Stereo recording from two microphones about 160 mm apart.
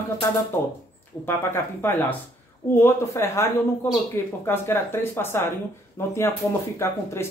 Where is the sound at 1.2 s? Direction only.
15° left (ahead or behind).